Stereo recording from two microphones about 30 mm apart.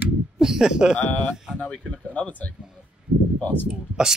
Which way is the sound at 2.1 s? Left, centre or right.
Left.